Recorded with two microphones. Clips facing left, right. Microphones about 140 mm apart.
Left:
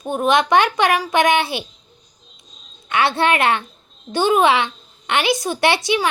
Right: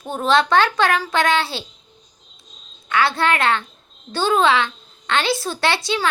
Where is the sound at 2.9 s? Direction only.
25° left (ahead or behind).